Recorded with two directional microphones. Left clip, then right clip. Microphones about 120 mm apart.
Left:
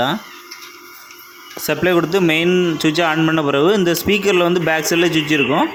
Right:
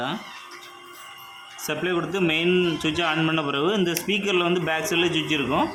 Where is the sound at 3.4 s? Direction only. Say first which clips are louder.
Left 9 dB; 55° left (ahead or behind).